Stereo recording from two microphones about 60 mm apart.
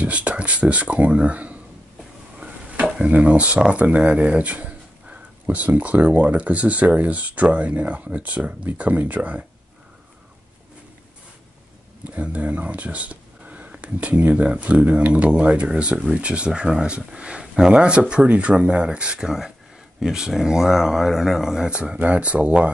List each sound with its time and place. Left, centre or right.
0.0 s speech: right
12.1 s speech: right